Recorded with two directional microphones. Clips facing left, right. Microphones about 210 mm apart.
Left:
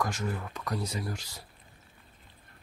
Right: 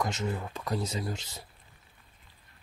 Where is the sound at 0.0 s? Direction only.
20° right (ahead or behind).